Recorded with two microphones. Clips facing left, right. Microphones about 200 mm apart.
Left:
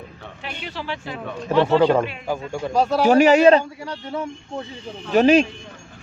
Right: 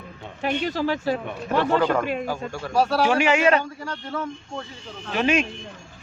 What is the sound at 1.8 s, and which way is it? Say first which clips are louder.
Speech: left 4 dB; 25° left (ahead or behind).